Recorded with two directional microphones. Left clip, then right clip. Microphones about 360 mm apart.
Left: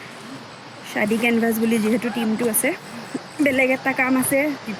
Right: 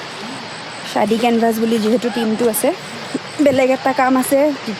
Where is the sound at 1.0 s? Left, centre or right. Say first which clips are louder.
Right 5 dB; centre.